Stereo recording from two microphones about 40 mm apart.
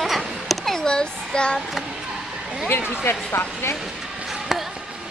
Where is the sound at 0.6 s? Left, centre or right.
Centre.